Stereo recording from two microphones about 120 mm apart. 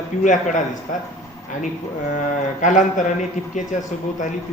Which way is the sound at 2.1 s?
90° left.